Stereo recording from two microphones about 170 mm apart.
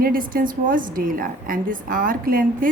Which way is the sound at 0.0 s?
60° right (ahead or behind).